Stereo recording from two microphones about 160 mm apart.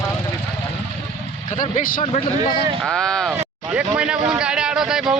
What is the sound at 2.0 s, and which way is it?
Speech, 40° left (ahead or behind).